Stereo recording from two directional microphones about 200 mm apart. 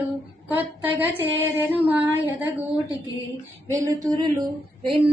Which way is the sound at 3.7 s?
15° right (ahead or behind).